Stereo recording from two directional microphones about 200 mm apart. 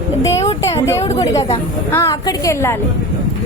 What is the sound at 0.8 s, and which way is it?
A woman's voice, 15° left (ahead or behind).